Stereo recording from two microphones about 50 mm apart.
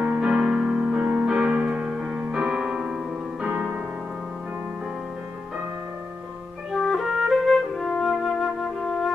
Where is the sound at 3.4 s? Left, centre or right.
Right.